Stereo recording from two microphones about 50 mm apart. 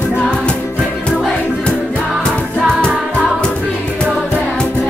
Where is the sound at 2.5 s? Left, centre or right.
Centre.